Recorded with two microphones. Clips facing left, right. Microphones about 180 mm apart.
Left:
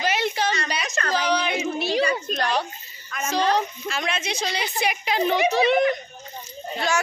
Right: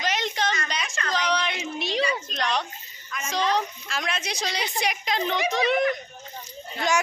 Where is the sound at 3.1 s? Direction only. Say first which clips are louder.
Left 4 dB; 50° left (ahead or behind).